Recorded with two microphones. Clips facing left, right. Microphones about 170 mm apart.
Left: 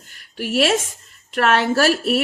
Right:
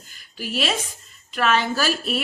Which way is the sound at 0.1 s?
70° left (ahead or behind).